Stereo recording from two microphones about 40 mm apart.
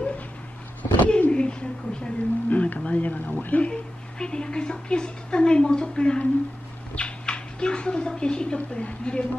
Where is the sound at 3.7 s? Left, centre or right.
Left.